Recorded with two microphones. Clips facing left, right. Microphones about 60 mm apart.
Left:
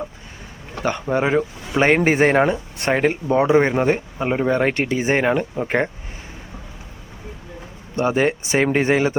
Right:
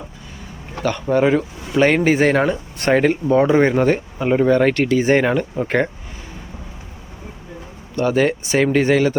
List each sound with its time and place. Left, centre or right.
0.8 s speech: left
7.9 s speech: left